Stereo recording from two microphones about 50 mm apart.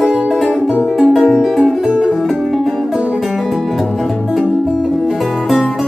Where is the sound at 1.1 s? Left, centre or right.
Centre.